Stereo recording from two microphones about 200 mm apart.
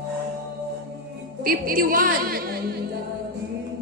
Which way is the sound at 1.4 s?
45° right (ahead or behind).